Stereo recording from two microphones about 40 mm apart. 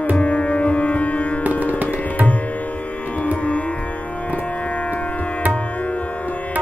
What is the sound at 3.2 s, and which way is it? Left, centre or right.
Music, left.